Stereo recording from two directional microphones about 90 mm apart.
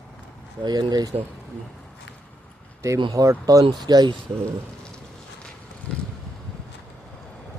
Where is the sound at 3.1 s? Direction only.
40° right (ahead or behind).